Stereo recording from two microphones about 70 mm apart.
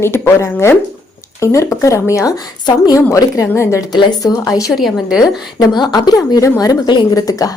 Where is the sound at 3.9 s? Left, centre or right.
Left.